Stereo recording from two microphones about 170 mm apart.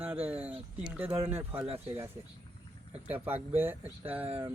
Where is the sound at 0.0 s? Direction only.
10° right (ahead or behind).